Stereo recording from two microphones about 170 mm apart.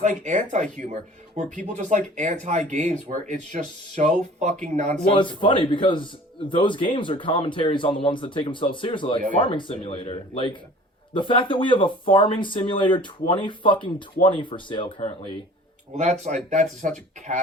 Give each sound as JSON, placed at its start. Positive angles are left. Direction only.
{"t": 0.0, "sound": "speech", "side_deg": -45}
{"t": 5.1, "sound": "speech", "side_deg": 30}
{"t": 16.0, "sound": "speech", "side_deg": -45}